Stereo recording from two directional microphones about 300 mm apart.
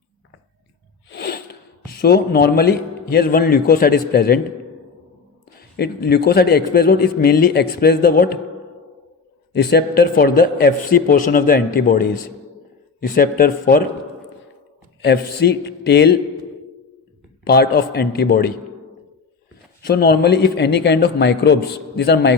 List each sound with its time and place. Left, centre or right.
1.1 s a sound: left
1.9 s a man's voice: left
5.5 s a man's voice: left
9.5 s speech: left
15.0 s a man's voice: left
17.4 s a man's voice: left
19.8 s a man's voice: left